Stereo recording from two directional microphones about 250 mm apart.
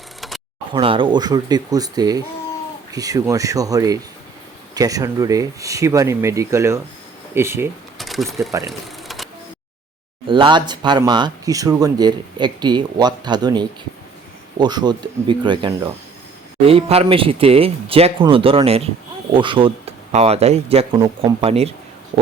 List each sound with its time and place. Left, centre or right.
0.2 s a sound: centre
0.7 s speech: centre
7.9 s sewing machine: centre
9.0 s printer: centre
10.2 s speech: centre